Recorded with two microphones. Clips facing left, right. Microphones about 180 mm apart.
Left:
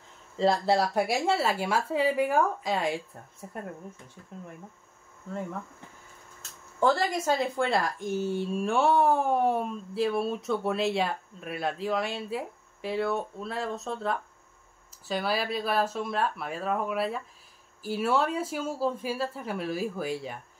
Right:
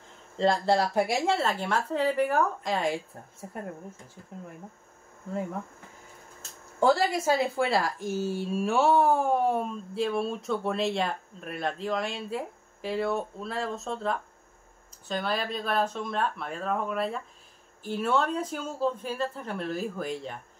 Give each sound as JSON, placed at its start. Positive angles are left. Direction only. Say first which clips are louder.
{"t": 0.4, "sound": "a woman's voice", "louder": "even", "side_deg": 5}
{"t": 6.8, "sound": "a woman's voice", "louder": "right 2 dB", "side_deg": -10}